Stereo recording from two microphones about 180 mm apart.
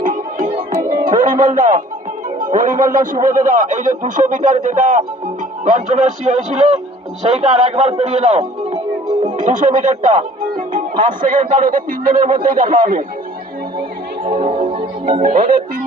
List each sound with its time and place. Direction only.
0.0 s music: 50° right (ahead or behind)
1.1 s a man's voice: 45° right (ahead or behind)
14.4 s music: 30° right (ahead or behind)
15.1 s speech: 45° right (ahead or behind)